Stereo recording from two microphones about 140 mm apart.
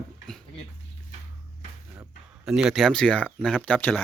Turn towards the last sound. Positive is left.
turn(degrees=10)  # may be behind; listen again after turning